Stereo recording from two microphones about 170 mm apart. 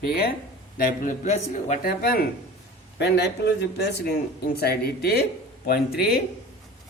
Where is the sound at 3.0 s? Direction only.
80° left.